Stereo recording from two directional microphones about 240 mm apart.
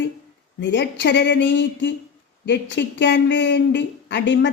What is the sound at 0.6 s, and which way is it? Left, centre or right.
Speech, left.